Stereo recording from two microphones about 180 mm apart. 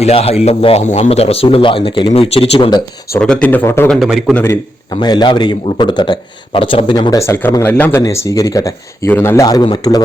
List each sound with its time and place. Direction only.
0.0 s speech: 35° left (ahead or behind)
3.2 s speech: 5° left (ahead or behind)
4.0 s a man's voice: 5° right (ahead or behind)
4.9 s a man's voice: 25° left (ahead or behind)